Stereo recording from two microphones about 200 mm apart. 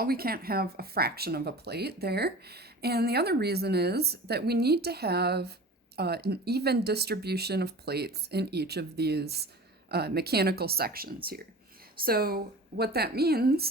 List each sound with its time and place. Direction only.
0.0 s speech: 50° right (ahead or behind)